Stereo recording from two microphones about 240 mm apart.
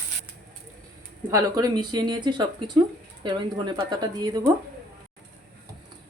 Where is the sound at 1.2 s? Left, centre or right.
Centre.